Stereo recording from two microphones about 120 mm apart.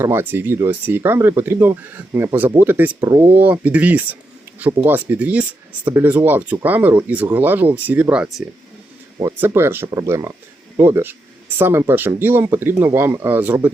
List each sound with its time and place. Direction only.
0.0 s speech: 20° right (ahead or behind)
9.4 s speech: 20° right (ahead or behind)